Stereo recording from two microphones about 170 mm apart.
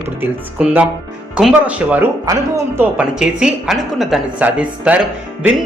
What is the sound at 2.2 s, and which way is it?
Speech, 20° right (ahead or behind).